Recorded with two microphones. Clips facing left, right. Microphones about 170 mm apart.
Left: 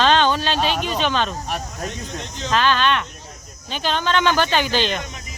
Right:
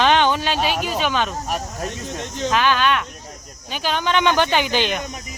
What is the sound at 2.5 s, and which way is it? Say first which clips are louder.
Speech: even; 10° right (ahead or behind).